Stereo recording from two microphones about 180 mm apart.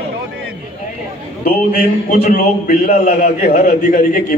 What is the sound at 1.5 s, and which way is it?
A man's voice, 50° left (ahead or behind).